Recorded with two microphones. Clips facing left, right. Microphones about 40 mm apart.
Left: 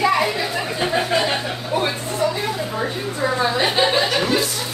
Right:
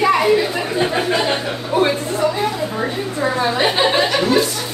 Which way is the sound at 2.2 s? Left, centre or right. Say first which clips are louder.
Right 3 dB; right.